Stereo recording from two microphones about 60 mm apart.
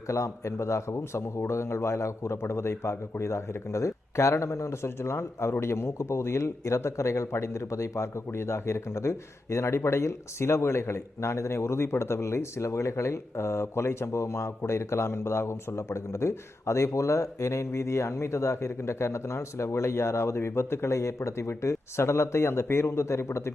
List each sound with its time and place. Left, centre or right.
0.1 s a man's voice: left